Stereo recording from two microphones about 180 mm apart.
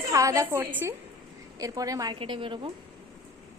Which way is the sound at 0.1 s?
15° right (ahead or behind).